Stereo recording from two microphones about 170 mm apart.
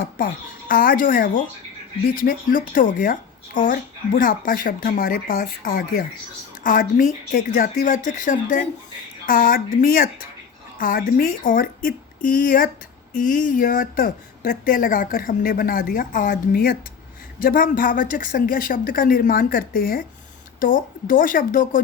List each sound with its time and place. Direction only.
0.2 s a woman's voice: 55° left (ahead or behind)